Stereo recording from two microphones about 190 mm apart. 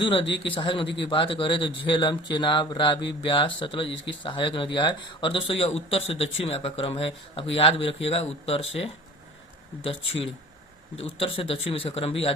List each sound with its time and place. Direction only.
0.0 s a man's voice: 25° left (ahead or behind)